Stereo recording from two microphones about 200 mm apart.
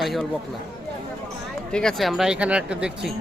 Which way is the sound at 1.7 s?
5° left (ahead or behind).